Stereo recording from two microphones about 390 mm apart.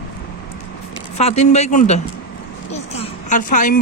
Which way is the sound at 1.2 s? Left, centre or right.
Centre.